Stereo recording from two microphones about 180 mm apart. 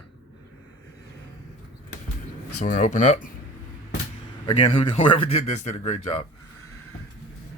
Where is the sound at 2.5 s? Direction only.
45° left (ahead or behind).